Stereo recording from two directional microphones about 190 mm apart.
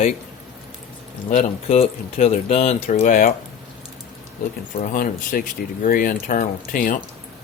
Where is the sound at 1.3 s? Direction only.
35° left (ahead or behind).